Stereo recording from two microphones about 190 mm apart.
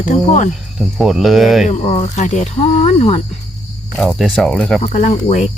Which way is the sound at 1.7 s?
30° left (ahead or behind).